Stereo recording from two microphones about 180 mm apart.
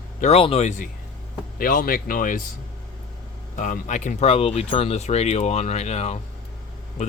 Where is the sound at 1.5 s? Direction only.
50° left (ahead or behind).